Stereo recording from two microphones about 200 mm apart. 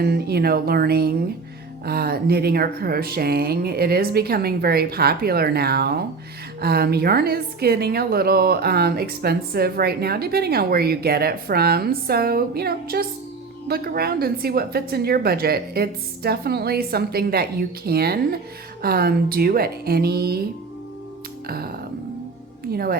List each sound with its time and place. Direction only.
0.0 s a woman's voice: 50° right (ahead or behind)
21.4 s a woman's voice: 50° right (ahead or behind)